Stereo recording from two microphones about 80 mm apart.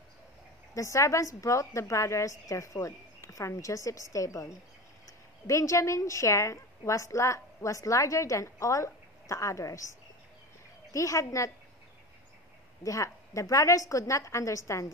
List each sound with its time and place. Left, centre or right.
0.7 s a woman's voice: left
10.9 s a woman's voice: left
12.8 s a woman's voice: left